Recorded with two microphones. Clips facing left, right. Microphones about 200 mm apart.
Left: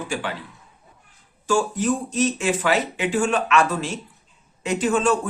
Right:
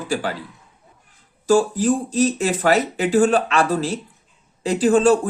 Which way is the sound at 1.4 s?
35° right (ahead or behind).